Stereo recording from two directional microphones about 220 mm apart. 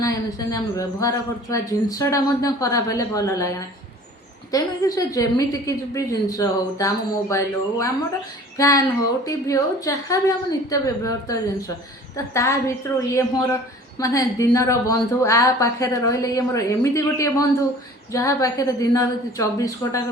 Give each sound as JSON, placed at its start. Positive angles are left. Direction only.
{"t": 0.0, "sound": "a man's voice", "side_deg": 15}
{"t": 8.5, "sound": "a sound", "side_deg": 15}
{"t": 9.2, "sound": "a man's voice", "side_deg": 15}